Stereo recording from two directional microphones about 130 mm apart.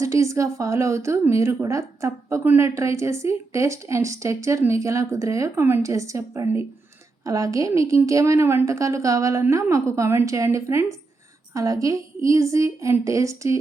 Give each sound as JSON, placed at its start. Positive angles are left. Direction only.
{"t": 0.0, "sound": "a woman's voice", "side_deg": -25}